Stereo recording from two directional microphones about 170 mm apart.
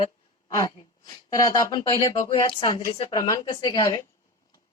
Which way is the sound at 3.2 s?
20° left (ahead or behind).